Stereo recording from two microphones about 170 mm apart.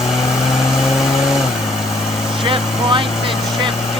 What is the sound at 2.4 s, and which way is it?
Vehicle, 30° right (ahead or behind).